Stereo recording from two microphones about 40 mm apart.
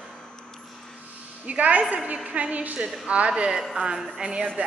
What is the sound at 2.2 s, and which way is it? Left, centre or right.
Speech, right.